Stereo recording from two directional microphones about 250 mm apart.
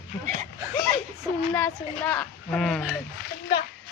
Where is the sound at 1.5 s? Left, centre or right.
Centre.